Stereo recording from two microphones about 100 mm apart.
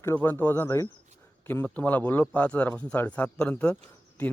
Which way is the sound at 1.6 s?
15° left (ahead or behind).